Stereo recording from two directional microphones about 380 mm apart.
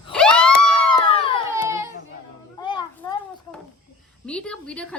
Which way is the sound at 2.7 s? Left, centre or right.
Centre.